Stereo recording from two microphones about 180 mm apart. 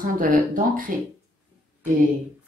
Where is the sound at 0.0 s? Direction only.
50° right (ahead or behind).